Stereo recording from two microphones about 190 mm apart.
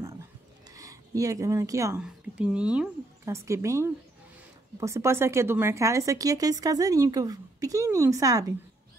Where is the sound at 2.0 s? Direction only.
5° right (ahead or behind).